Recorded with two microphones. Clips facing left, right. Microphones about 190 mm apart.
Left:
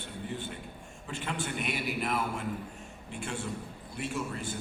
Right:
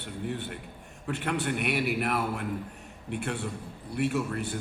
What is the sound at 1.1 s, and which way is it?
A man's voice, 65° right (ahead or behind).